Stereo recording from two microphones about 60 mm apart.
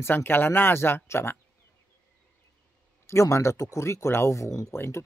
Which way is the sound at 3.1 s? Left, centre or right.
Left.